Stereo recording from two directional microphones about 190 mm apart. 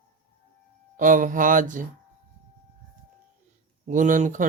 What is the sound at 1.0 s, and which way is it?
Speech, 45° right (ahead or behind).